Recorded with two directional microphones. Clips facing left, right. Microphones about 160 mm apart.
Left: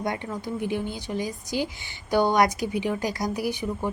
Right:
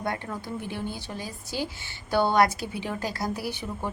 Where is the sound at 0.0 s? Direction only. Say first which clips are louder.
Left 2 dB; 15° left (ahead or behind).